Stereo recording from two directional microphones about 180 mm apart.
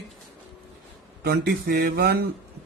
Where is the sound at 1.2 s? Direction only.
65° right (ahead or behind).